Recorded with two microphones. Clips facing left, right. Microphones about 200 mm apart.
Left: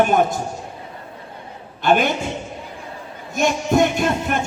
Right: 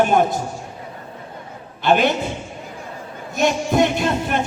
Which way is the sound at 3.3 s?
50° left (ahead or behind).